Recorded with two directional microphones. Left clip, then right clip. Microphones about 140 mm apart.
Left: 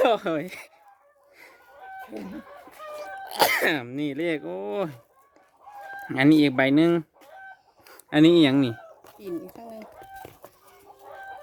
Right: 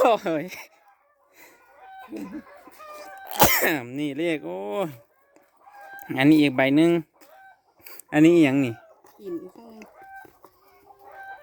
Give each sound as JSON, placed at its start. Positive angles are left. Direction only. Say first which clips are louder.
{"t": 0.0, "sound": "speech", "louder": "right 2 dB", "side_deg": -10}
{"t": 2.9, "sound": "cough", "louder": "left 4 dB", "side_deg": -45}
{"t": 3.2, "sound": "speech", "louder": "right 1 dB", "side_deg": -15}
{"t": 6.0, "sound": "speech", "louder": "right 1 dB", "side_deg": -10}
{"t": 9.0, "sound": "speech", "louder": "even", "side_deg": 50}